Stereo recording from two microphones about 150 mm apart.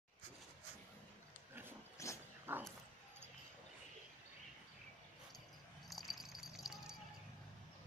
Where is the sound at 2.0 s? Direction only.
20° left (ahead or behind).